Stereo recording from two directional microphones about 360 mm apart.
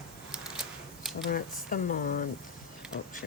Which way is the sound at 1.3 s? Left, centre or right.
Left.